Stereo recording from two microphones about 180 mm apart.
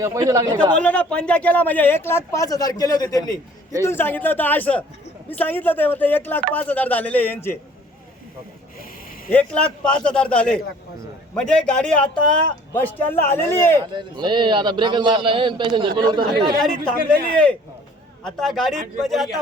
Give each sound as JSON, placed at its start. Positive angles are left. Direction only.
{"t": 0.0, "sound": "a man's voice", "side_deg": -20}
{"t": 0.8, "sound": "speech", "side_deg": 5}
{"t": 9.3, "sound": "a man's voice", "side_deg": 5}
{"t": 13.9, "sound": "a man's voice", "side_deg": -25}
{"t": 16.6, "sound": "a man's voice", "side_deg": 5}
{"t": 18.3, "sound": "a man's voice", "side_deg": 0}